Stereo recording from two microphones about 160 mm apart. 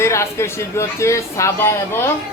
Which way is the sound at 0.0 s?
15° left (ahead or behind).